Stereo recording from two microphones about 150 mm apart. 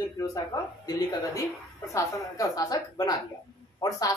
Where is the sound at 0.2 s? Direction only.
20° left (ahead or behind).